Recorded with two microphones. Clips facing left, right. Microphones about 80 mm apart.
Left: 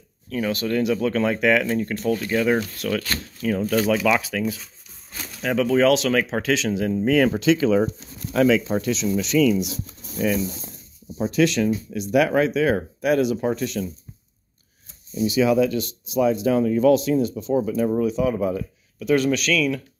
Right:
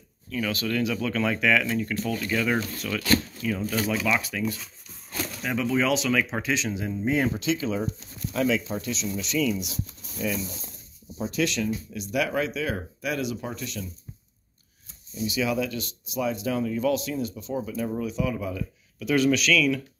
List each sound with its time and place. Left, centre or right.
0.3 s speech: left
2.8 s speech: left
3.8 s speech: left
5.4 s speech: left
15.2 s speech: left